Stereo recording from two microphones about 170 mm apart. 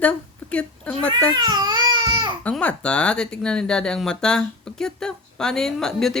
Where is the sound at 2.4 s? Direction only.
10° left (ahead or behind).